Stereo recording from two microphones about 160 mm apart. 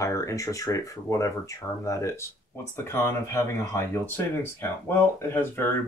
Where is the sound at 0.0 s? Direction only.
20° left (ahead or behind).